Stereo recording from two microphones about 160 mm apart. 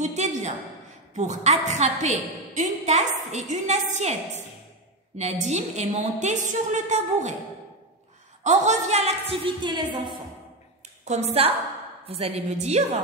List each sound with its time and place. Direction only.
0.0 s a woman's voice: 45° right (ahead or behind)
8.5 s a woman's voice: 45° right (ahead or behind); by 10.1 s 30° right (ahead or behind)
11.1 s a woman's voice: 40° right (ahead or behind)